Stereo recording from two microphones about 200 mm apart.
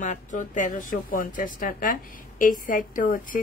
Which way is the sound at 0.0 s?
40° left (ahead or behind).